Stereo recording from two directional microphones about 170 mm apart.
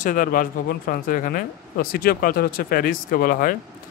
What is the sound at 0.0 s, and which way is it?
Speech, 55° left (ahead or behind).